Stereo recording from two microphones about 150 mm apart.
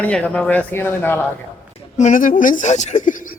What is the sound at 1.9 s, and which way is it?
A woman's voice, 55° left (ahead or behind).